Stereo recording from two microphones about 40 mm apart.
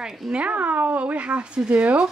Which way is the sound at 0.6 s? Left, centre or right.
Right.